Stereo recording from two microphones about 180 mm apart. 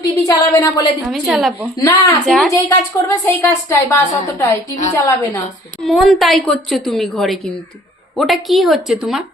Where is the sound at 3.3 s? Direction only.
15° left (ahead or behind).